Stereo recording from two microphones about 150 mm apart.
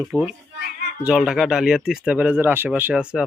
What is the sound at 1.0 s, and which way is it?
Speech, 5° right (ahead or behind).